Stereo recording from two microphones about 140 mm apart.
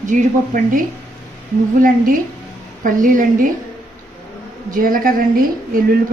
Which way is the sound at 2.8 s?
75° right (ahead or behind).